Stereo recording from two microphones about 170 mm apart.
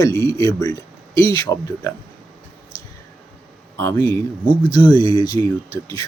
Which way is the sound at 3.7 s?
20° left (ahead or behind).